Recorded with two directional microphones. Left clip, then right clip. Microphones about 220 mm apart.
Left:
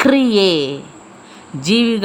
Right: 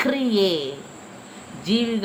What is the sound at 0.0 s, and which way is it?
Speech, 50° left (ahead or behind).